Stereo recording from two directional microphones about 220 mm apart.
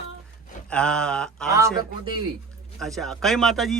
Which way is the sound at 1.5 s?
15° right (ahead or behind).